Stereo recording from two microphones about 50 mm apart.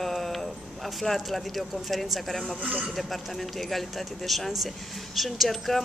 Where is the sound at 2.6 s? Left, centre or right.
Right.